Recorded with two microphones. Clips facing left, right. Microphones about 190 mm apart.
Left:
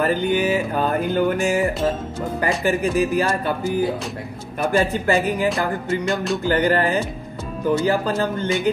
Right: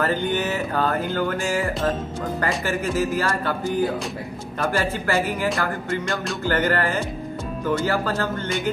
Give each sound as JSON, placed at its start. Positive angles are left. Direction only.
{"t": 0.0, "sound": "music", "side_deg": 10}
{"t": 6.0, "sound": "music", "side_deg": 0}
{"t": 6.4, "sound": "music", "side_deg": 15}